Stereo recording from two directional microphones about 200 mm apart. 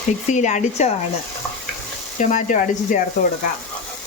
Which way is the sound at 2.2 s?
40° left (ahead or behind).